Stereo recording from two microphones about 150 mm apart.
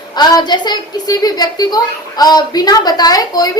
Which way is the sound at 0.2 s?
30° left (ahead or behind).